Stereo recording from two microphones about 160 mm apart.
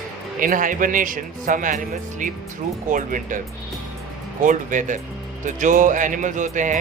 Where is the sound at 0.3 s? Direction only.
55° right (ahead or behind).